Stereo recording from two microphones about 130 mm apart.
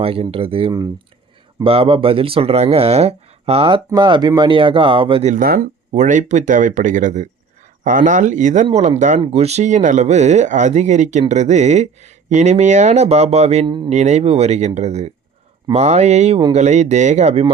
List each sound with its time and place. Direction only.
0.0 s speech: 45° right (ahead or behind)
3.8 s speech: 35° right (ahead or behind)
5.2 s speech: 80° right
5.9 s speech: 70° right (ahead or behind)
7.9 s speech: 85° right
8.6 s speech: 55° right (ahead or behind); by 9.2 s 75° right (ahead or behind)
9.2 s speech: 55° right (ahead or behind)
13.7 s speech: 35° right (ahead or behind)
13.9 s speech: 60° right (ahead or behind)